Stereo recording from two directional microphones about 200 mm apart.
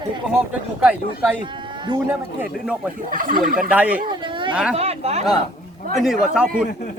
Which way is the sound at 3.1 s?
45° right (ahead or behind).